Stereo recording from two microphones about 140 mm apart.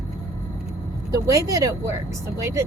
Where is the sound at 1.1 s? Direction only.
25° right (ahead or behind).